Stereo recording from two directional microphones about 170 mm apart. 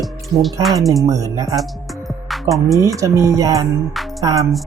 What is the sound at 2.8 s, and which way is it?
Speech, 20° right (ahead or behind).